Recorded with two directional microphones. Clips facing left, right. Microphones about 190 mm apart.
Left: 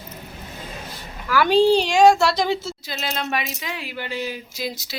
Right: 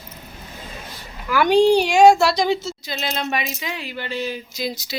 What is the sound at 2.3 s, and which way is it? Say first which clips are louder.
Speech: right 2 dB; 5° left (ahead or behind).